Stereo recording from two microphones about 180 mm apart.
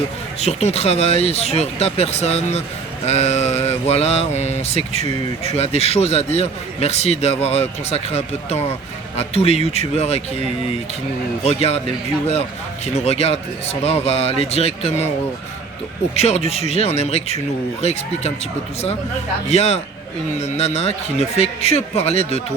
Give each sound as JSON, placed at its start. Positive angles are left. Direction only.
{"t": 0.3, "sound": "speech", "side_deg": 35}
{"t": 11.4, "sound": "speech", "side_deg": 35}
{"t": 16.1, "sound": "speech", "side_deg": 35}
{"t": 19.5, "sound": "speech", "side_deg": 35}